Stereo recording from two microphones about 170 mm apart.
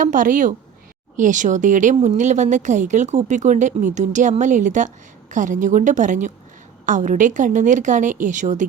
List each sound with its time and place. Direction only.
0.0 s speech: 50° right (ahead or behind)